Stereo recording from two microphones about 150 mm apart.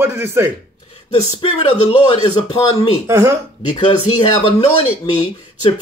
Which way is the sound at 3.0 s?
15° right (ahead or behind).